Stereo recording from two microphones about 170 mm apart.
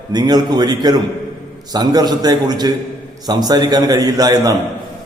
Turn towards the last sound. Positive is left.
turn(degrees=-20)  # may be behind; listen again after turning